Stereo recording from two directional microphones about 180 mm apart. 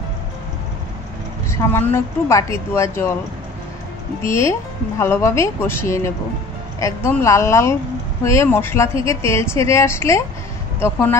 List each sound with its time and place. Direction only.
1.5 s speech: 15° left (ahead or behind)
4.2 s speech: 15° left (ahead or behind)